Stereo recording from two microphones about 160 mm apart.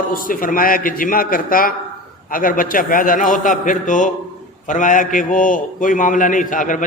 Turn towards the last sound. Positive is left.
turn(degrees=55)  # may be behind; listen again after turning